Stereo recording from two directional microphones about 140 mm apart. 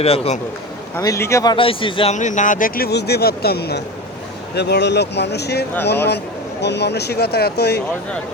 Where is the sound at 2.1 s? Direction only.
60° left (ahead or behind); by 3.5 s 90° left.